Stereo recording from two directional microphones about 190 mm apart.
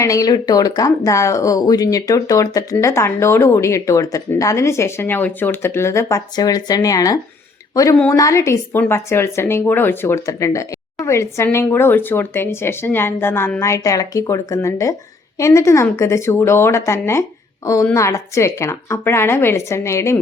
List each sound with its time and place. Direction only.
0.0 s speech: 20° left (ahead or behind)